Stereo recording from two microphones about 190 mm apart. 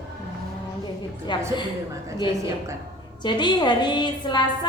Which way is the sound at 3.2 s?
25° left (ahead or behind).